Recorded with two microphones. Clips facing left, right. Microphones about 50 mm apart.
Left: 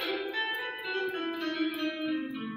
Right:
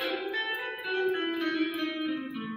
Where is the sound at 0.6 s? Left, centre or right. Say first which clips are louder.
Right 2 dB; right.